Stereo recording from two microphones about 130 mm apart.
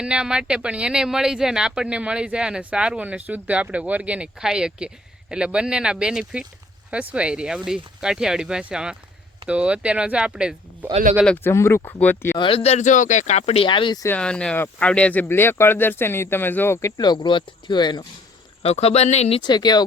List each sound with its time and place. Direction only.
0.0 s speech: 5° right (ahead or behind)
11.4 s speech: 20° left (ahead or behind)
12.4 s speech: 45° left (ahead or behind)
13.7 s speech: 40° left (ahead or behind)
14.2 s speech: 5° left (ahead or behind)
17.0 s speech: 35° left (ahead or behind)
18.6 s speech: 55° left (ahead or behind)
19.4 s speech: 35° left (ahead or behind)